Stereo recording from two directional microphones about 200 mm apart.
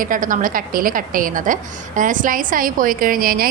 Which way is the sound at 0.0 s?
40° right (ahead or behind).